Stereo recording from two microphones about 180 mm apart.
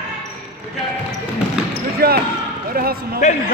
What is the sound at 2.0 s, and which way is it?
Speech, 60° right (ahead or behind).